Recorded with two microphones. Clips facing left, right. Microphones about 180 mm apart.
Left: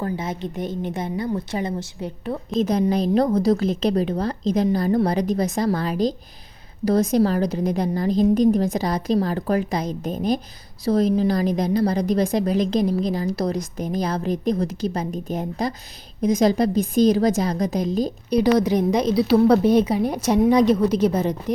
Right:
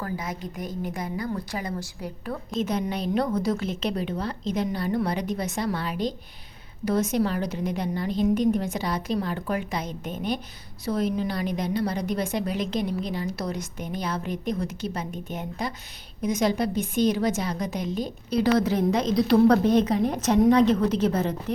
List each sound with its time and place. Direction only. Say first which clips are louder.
0.0 s a woman's voice: left 5 dB; 25° left (ahead or behind)
2.6 s a woman's voice: left 7 dB; 35° left (ahead or behind)
18.3 s a woman's voice: left 4 dB; 15° left (ahead or behind)